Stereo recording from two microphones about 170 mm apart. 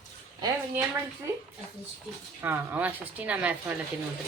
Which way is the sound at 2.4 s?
10° right (ahead or behind).